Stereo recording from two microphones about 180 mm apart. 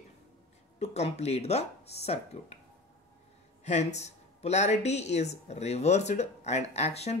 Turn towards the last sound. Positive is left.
turn(degrees=35)  # may be behind; listen again after turning